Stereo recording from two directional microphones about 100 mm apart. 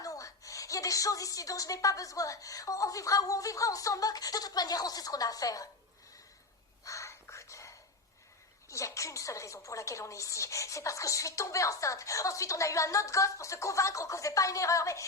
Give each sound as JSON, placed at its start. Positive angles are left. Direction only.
{"t": 0.0, "sound": "a woman's voice", "side_deg": 35}
{"t": 6.8, "sound": "whispering", "side_deg": 30}
{"t": 8.7, "sound": "a woman's voice", "side_deg": 30}